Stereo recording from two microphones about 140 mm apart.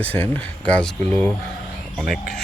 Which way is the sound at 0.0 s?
10° left (ahead or behind).